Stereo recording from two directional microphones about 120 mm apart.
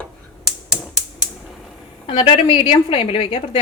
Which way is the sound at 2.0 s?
50° left (ahead or behind).